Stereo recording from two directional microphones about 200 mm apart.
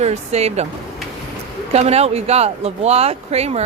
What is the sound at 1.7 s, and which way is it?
Speech, 30° right (ahead or behind).